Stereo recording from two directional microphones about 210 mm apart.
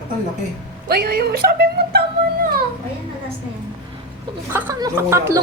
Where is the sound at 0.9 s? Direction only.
45° right (ahead or behind).